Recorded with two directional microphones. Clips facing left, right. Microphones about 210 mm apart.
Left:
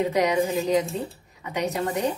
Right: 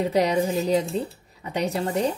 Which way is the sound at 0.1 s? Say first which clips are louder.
Right 1 dB; 30° right (ahead or behind).